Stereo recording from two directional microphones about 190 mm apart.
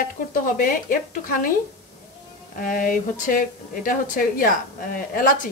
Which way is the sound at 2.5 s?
45° left (ahead or behind).